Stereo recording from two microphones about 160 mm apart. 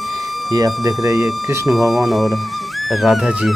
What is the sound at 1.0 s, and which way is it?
Speech, 20° right (ahead or behind).